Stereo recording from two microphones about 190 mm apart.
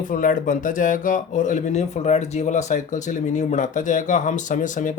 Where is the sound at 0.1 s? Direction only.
45° left (ahead or behind).